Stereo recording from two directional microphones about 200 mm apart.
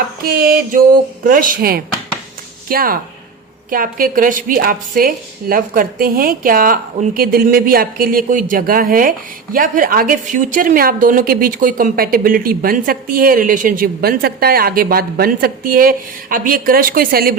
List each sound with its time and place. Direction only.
0.3 s a woman's voice: 50° right (ahead or behind)